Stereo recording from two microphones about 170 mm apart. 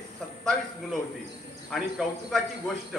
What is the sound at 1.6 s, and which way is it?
Speech, centre (ahead or behind).